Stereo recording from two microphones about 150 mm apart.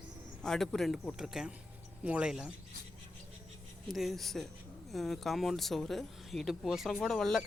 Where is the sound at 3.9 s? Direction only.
Centre (ahead or behind).